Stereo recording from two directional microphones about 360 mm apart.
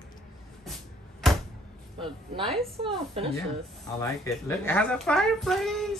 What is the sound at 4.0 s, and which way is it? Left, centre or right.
Speech, centre.